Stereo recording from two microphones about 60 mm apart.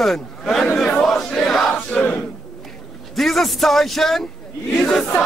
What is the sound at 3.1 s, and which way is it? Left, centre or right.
A man's voice, centre.